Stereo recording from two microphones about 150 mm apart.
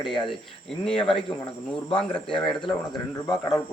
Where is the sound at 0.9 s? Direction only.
35° left (ahead or behind).